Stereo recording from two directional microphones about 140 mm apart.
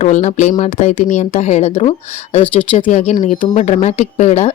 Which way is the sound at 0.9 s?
65° left (ahead or behind).